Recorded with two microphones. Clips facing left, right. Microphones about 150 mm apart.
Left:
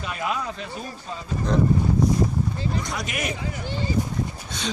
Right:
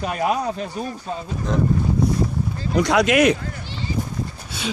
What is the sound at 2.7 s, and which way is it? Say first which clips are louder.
Speech: right 12 dB; 75° right (ahead or behind).